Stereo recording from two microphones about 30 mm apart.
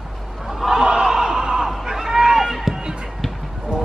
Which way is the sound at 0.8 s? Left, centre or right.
Right.